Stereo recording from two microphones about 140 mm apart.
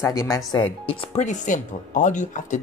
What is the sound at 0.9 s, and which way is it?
Speech, 50° left (ahead or behind).